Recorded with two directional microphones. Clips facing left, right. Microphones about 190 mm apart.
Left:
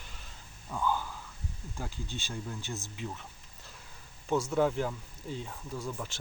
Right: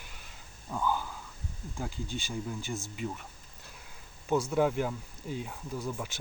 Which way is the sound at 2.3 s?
5° right (ahead or behind).